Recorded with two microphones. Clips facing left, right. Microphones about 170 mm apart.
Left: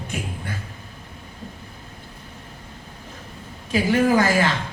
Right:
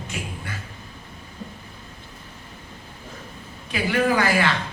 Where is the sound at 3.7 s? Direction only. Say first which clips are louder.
Left 3 dB; 45° left (ahead or behind).